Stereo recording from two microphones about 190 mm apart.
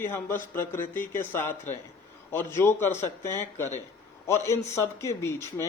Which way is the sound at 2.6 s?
10° left (ahead or behind).